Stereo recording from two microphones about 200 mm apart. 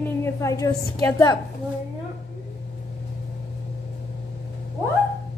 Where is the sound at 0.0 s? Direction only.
15° left (ahead or behind).